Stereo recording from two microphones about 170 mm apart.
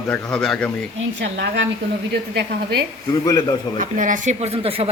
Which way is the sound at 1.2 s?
90° right.